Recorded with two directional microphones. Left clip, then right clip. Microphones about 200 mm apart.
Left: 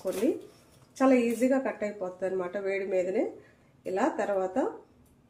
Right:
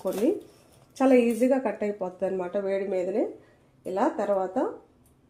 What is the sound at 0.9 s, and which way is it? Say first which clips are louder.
A woman's voice: right 3 dB; 35° right (ahead or behind).